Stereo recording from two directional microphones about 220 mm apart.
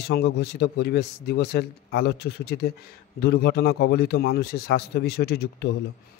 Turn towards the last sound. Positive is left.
turn(degrees=45)  # may be behind; listen again after turning